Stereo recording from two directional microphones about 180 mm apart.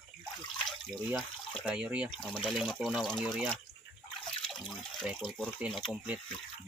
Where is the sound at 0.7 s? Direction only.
Centre (ahead or behind).